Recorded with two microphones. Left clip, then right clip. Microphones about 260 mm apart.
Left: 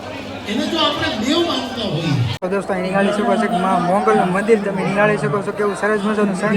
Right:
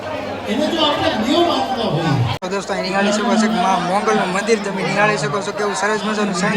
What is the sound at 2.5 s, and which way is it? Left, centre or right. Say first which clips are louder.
A man's voice: left 3 dB; centre.